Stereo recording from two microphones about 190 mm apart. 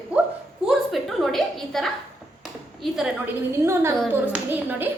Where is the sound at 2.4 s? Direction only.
Centre (ahead or behind).